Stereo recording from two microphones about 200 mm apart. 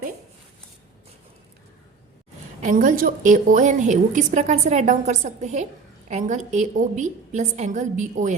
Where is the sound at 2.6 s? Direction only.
40° right (ahead or behind).